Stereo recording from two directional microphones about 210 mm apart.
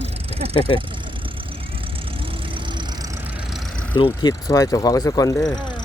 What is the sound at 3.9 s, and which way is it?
Speech, 20° left (ahead or behind).